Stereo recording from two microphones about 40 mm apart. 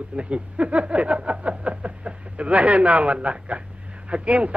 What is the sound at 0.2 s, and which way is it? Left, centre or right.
A man's voice, right.